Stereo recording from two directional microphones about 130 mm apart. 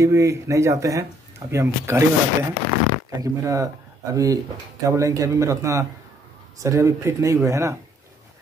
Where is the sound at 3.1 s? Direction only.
25° right (ahead or behind).